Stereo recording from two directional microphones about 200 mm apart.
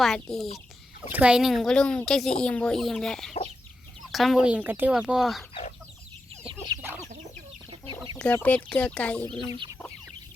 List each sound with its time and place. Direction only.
0.0 s speech: centre (ahead or behind)
8.2 s speech: 10° left (ahead or behind)